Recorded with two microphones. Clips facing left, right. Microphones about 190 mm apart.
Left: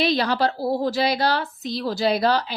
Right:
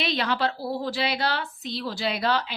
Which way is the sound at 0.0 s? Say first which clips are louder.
Left 5 dB; 35° left (ahead or behind).